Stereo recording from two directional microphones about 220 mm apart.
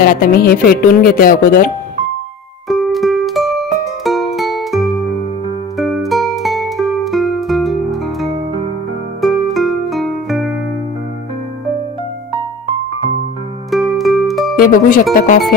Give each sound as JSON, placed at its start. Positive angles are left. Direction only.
{"t": 0.0, "sound": "speech", "side_deg": 40}
{"t": 2.7, "sound": "music", "side_deg": 0}
{"t": 13.7, "sound": "music", "side_deg": 0}
{"t": 14.6, "sound": "speech", "side_deg": 40}